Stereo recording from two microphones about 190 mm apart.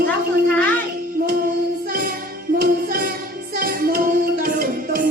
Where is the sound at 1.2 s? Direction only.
50° right (ahead or behind).